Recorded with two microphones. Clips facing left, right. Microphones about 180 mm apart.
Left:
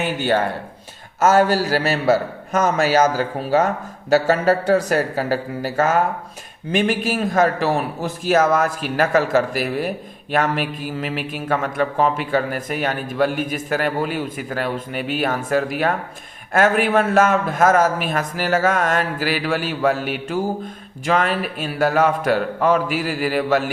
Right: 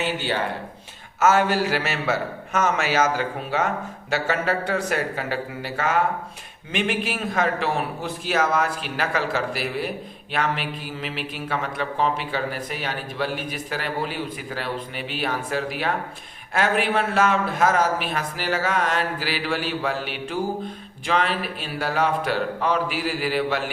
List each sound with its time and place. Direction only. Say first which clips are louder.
0.0 s a man's voice: left 5 dB; 50° left (ahead or behind)